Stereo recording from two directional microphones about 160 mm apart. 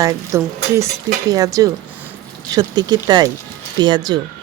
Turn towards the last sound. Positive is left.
turn(degrees=-25)  # may be behind; listen again after turning